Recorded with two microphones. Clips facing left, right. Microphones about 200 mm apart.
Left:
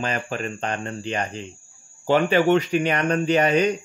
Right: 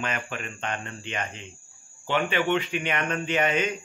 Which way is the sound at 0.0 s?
35° left (ahead or behind).